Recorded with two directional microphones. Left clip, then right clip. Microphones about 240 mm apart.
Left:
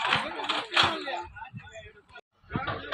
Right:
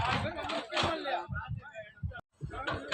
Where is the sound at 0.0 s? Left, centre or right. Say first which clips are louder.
Left 5 dB; left.